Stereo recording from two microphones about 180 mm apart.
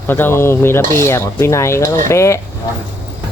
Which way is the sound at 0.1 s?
10° left (ahead or behind).